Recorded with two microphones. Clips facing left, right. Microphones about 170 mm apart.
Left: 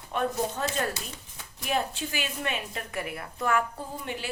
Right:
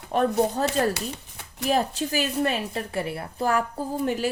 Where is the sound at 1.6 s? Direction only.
40° right (ahead or behind).